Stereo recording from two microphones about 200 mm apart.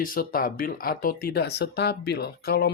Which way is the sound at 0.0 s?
45° left (ahead or behind).